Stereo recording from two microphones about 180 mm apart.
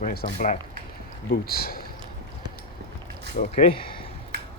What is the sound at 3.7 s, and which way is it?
Speech, 30° left (ahead or behind).